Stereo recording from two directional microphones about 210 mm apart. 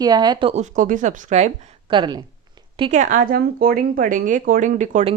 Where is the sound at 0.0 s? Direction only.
20° right (ahead or behind).